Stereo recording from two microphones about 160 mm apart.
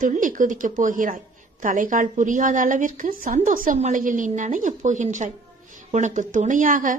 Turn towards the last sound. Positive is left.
turn(degrees=-55)  # may be behind; listen again after turning